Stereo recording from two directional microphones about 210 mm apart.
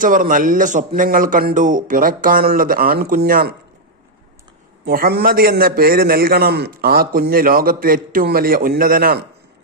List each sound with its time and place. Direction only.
0.0 s a man's voice: 40° right (ahead or behind)
4.9 s a man's voice: 45° right (ahead or behind)